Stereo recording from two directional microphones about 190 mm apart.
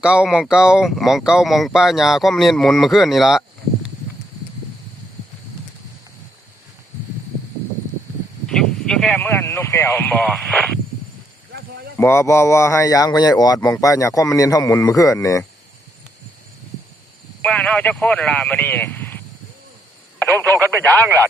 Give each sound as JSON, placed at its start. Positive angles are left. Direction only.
{"t": 0.0, "sound": "speech", "side_deg": -5}
{"t": 8.4, "sound": "a sound", "side_deg": 5}
{"t": 11.9, "sound": "speech", "side_deg": 15}
{"t": 17.4, "sound": "speech", "side_deg": 5}
{"t": 20.1, "sound": "telephone", "side_deg": 10}
{"t": 20.5, "sound": "speech", "side_deg": -10}